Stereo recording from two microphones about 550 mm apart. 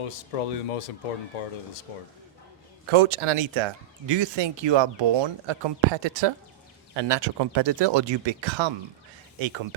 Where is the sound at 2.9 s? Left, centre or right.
Right.